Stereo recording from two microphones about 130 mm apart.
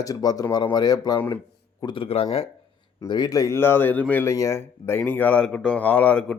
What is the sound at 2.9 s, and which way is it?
Speech, 30° left (ahead or behind).